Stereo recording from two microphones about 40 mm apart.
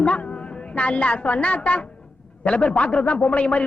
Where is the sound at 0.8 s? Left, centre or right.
Left.